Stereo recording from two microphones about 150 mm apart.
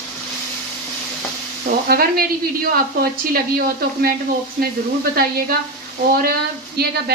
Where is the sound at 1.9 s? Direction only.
90° right.